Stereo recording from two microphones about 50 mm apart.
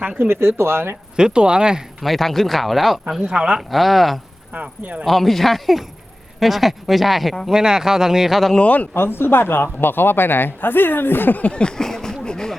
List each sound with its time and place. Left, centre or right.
0.3 s speech: right
1.1 s speech: centre
2.0 s speech: centre
3.2 s speech: centre
3.7 s speech: centre
4.5 s speech: right
5.0 s speech: centre
7.5 s speech: centre
8.6 s speech: left
9.0 s speech: left
11.4 s a sound: centre